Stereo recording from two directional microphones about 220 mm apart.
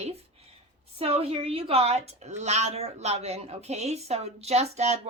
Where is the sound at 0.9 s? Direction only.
25° right (ahead or behind).